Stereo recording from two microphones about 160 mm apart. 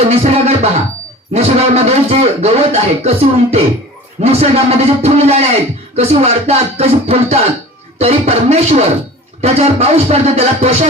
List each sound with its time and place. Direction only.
0.1 s music: 40° right (ahead or behind)
1.3 s a man's voice: 40° right (ahead or behind)